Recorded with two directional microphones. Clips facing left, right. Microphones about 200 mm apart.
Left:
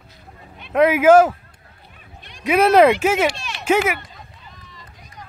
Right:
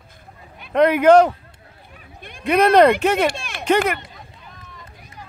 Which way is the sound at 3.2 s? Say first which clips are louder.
Even; 50° right (ahead or behind).